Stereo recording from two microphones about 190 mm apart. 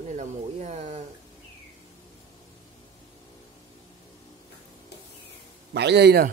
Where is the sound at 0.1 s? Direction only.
40° right (ahead or behind).